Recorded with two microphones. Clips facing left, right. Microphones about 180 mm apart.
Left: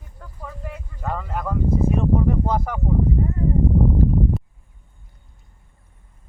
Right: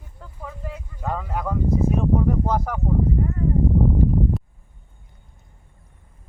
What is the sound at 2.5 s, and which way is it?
Speech, 5° left (ahead or behind).